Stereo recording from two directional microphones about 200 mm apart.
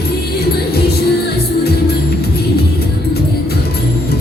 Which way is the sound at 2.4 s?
50° left (ahead or behind).